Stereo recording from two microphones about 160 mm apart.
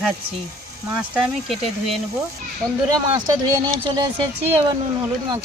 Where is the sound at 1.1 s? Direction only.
Centre (ahead or behind).